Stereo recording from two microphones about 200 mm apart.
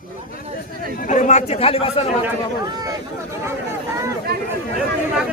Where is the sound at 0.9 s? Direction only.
40° left (ahead or behind).